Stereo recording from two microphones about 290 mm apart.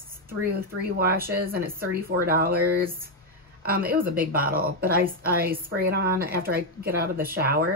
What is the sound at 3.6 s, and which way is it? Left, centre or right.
Speech, right.